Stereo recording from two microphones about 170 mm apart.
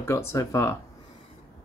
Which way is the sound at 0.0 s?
15° left (ahead or behind).